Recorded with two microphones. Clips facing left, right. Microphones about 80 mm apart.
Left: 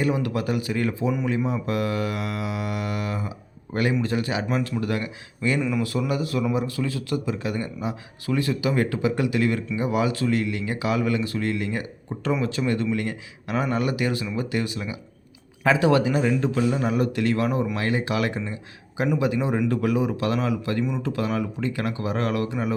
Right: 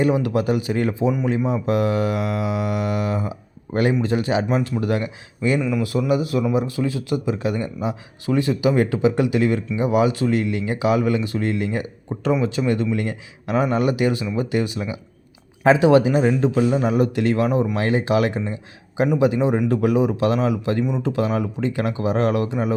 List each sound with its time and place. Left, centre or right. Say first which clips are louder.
0.0 s a man's voice: right 5 dB; right
5.5 s speech: right 1 dB; centre
6.1 s a man's voice: right 5 dB; centre